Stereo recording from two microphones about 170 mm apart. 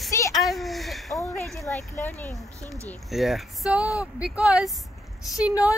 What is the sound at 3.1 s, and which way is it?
Speech, centre (ahead or behind).